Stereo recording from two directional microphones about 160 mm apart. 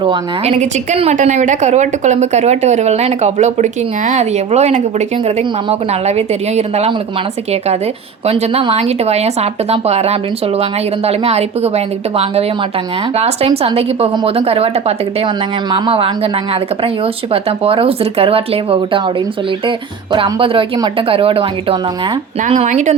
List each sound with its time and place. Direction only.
0.0 s speech: 30° right (ahead or behind)
8.3 s speech: 40° right (ahead or behind)
20.1 s speech: 35° right (ahead or behind)
22.4 s speech: 50° right (ahead or behind)